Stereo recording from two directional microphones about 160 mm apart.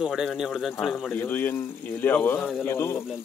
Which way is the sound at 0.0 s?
Centre (ahead or behind).